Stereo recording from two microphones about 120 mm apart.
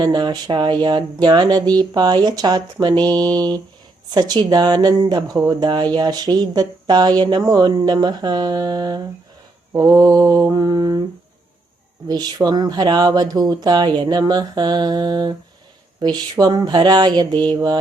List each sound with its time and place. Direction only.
0.0 s speech: 35° right (ahead or behind)
12.0 s speech: 35° right (ahead or behind)